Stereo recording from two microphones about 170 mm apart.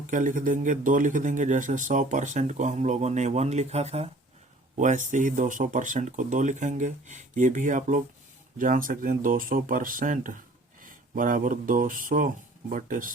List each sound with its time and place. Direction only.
0.1 s speech: 50° right (ahead or behind)